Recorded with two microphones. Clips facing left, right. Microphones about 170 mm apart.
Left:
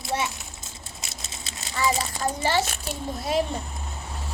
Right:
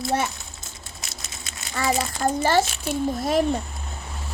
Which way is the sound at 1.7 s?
50° right (ahead or behind).